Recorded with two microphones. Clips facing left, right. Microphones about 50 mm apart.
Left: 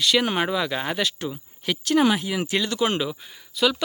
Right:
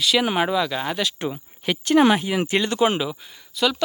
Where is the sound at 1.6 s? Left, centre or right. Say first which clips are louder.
Right 3 dB; right.